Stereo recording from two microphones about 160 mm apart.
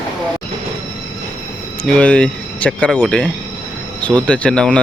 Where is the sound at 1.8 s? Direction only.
5° left (ahead or behind).